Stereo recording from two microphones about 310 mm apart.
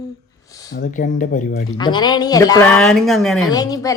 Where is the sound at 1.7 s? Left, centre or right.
Centre.